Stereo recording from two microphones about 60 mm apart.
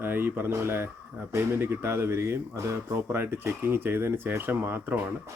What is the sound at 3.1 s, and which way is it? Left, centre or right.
Speech, right.